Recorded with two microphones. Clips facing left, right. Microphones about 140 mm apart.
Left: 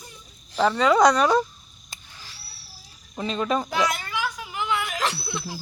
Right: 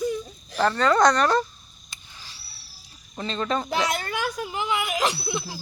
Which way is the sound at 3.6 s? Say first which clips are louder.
Even; 25° right (ahead or behind).